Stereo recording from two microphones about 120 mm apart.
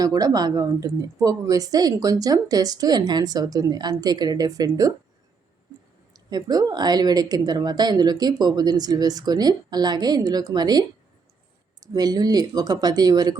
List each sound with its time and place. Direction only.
0.0 s speech: 30° right (ahead or behind)
6.1 s speech: 30° right (ahead or behind)